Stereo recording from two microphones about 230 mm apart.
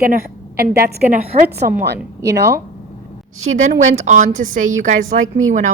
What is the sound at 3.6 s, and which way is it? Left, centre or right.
A woman's voice, right.